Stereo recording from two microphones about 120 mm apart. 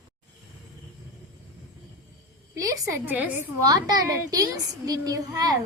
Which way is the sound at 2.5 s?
30° right (ahead or behind).